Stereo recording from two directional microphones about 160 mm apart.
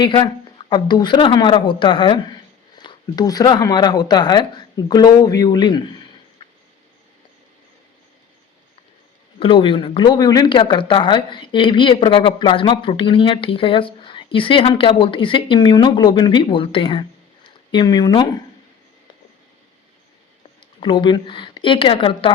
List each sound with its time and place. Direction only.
0.0 s speech: 30° left (ahead or behind)
9.4 s speech: 35° left (ahead or behind)
20.6 s speech: 30° left (ahead or behind)